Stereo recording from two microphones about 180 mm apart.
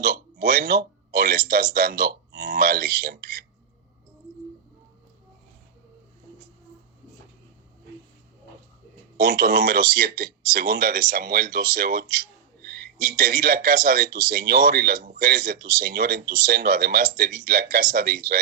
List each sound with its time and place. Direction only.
0.0 s speech: 55° right (ahead or behind)
9.1 s speech: 60° right (ahead or behind)